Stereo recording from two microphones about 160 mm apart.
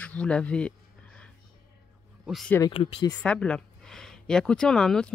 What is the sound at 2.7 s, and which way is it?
Speech, 30° left (ahead or behind).